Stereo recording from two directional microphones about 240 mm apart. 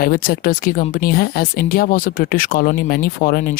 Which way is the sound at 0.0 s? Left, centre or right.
Left.